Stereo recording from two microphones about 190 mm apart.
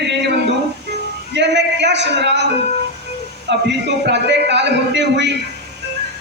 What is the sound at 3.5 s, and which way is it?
Speech, 65° right (ahead or behind).